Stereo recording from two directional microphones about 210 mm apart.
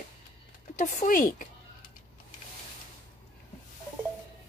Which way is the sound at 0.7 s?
40° left (ahead or behind).